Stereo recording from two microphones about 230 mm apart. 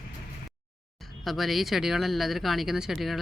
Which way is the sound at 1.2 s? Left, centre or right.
Centre.